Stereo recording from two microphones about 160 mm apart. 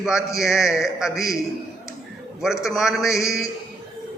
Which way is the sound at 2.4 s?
5° right (ahead or behind).